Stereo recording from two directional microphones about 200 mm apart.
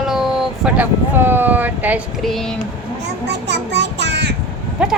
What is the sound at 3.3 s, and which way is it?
Child singing, 60° right (ahead or behind).